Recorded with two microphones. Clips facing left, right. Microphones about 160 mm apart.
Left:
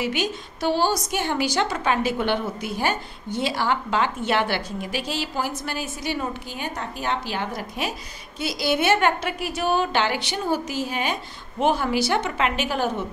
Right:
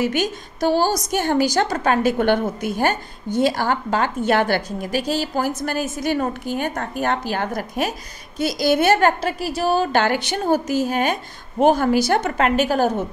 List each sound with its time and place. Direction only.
0.0 s a woman's voice: 45° right (ahead or behind)